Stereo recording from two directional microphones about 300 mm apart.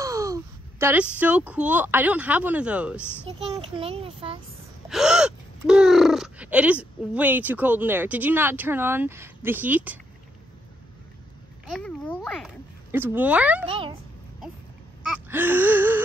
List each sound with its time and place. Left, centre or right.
0.0 s a woman's voice: centre
3.3 s a child's voice: centre
4.8 s speech: centre
11.6 s speech: centre
13.7 s gasp: centre
15.2 s gasp: centre